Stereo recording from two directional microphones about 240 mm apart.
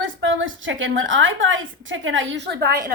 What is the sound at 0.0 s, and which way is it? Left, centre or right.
A woman's voice, right.